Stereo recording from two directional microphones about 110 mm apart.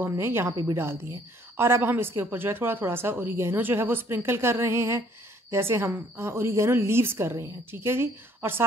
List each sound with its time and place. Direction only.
0.1 s speech: 20° right (ahead or behind)
1.6 s speech: 20° right (ahead or behind)